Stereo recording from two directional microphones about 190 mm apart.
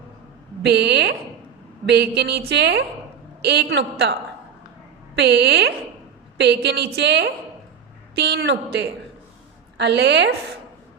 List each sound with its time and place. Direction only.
0.6 s a woman's voice: 65° right (ahead or behind)
5.1 s a woman's voice: 60° right (ahead or behind)